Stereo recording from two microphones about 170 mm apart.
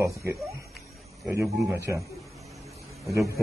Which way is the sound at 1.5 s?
Centre (ahead or behind).